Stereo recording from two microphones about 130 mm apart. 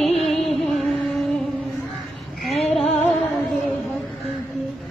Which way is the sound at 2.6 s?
Centre (ahead or behind).